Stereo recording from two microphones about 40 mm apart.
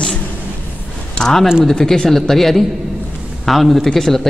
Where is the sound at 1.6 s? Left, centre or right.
Centre.